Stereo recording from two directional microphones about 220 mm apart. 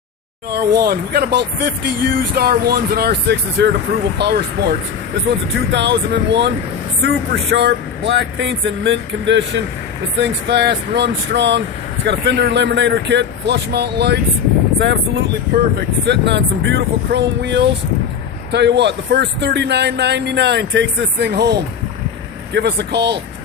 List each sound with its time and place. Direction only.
0.5 s speech: 45° right (ahead or behind)